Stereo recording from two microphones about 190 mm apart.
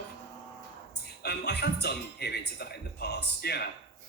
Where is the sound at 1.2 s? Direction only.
60° left (ahead or behind).